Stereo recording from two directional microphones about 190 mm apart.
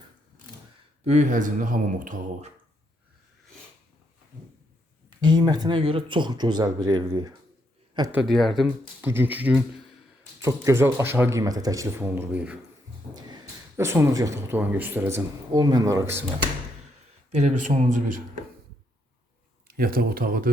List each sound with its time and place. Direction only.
1.0 s speech: 40° right (ahead or behind)
5.2 s speech: 20° right (ahead or behind)
8.1 s speech: centre (ahead or behind)
13.1 s speech: 20° right (ahead or behind)
17.3 s speech: 40° right (ahead or behind)
19.6 s speech: 50° right (ahead or behind)